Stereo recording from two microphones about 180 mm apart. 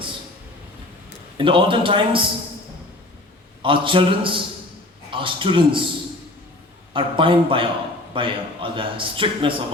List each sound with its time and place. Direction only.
1.4 s a man's voice: 30° right (ahead or behind)
3.6 s a man's voice: 30° right (ahead or behind)
6.9 s a man's voice: 30° right (ahead or behind)